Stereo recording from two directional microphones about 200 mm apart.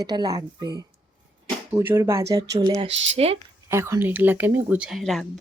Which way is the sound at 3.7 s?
15° right (ahead or behind).